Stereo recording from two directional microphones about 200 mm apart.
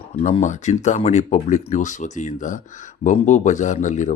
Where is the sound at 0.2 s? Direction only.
35° left (ahead or behind).